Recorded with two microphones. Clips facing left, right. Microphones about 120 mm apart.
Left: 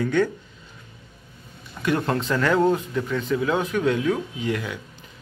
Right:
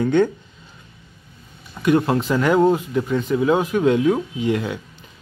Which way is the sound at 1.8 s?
15° right (ahead or behind).